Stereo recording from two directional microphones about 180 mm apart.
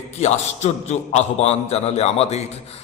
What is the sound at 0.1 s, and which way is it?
A man's voice, 40° left (ahead or behind).